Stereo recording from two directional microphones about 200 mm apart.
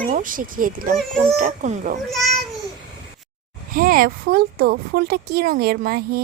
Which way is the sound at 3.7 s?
45° right (ahead or behind).